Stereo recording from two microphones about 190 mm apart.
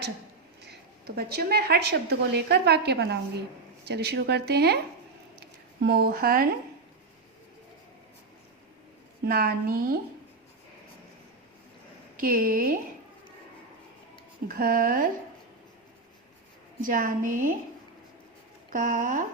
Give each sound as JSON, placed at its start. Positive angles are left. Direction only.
{"t": 0.6, "sound": "a woman's voice", "side_deg": -60}
{"t": 5.4, "sound": "a sound", "side_deg": -55}
{"t": 9.2, "sound": "a woman's voice", "side_deg": -50}
{"t": 12.1, "sound": "a woman's voice", "side_deg": -45}
{"t": 14.4, "sound": "a woman's voice", "side_deg": -50}
{"t": 16.8, "sound": "a woman's voice", "side_deg": -45}
{"t": 18.7, "sound": "a woman's voice", "side_deg": -45}